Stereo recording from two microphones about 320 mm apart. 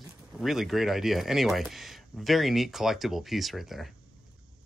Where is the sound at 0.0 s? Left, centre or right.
Centre.